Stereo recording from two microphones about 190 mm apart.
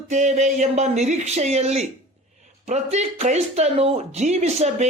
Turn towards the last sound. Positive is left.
turn(degrees=-35)  # may be behind; listen again after turning